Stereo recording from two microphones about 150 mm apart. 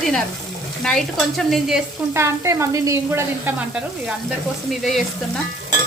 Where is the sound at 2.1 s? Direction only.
20° right (ahead or behind).